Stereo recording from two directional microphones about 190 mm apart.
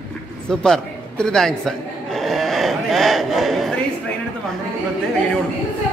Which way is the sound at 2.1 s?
Centre (ahead or behind).